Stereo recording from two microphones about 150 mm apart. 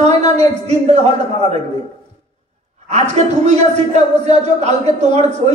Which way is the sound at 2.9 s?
50° right (ahead or behind).